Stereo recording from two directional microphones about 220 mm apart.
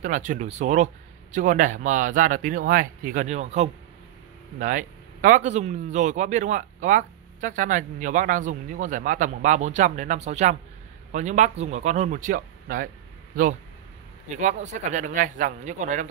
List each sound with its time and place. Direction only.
0.0 s speech: 35° right (ahead or behind)
14.3 s speech: 35° right (ahead or behind)